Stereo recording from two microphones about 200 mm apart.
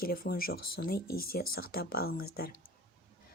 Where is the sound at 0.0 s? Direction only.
45° left (ahead or behind).